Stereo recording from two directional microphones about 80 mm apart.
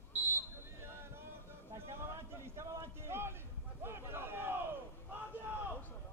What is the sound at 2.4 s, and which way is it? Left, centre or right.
Speech, right.